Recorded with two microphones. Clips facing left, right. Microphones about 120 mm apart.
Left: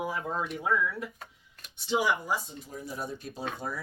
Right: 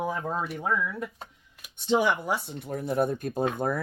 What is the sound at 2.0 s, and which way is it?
Speech, 65° right (ahead or behind).